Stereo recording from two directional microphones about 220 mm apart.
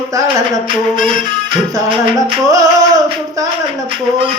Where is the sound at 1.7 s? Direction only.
20° right (ahead or behind).